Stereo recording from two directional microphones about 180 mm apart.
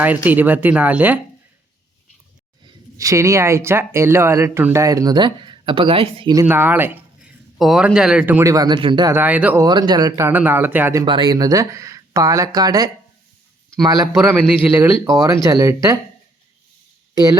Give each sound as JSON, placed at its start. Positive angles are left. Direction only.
{"t": 0.0, "sound": "speech", "side_deg": -10}
{"t": 3.0, "sound": "speech", "side_deg": -15}
{"t": 6.3, "sound": "speech", "side_deg": -15}
{"t": 9.1, "sound": "speech", "side_deg": -10}
{"t": 9.6, "sound": "speech", "side_deg": -25}
{"t": 11.0, "sound": "speech", "side_deg": -25}